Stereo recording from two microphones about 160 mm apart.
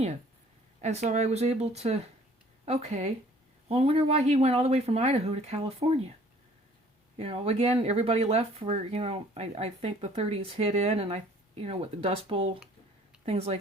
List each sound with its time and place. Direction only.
0.8 s speech: 45° right (ahead or behind)
7.2 s speech: 40° right (ahead or behind)